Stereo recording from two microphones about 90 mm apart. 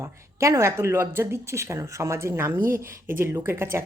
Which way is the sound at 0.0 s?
30° right (ahead or behind).